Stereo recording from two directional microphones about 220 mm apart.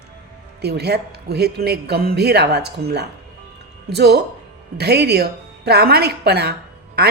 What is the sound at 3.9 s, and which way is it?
Speech, 50° right (ahead or behind).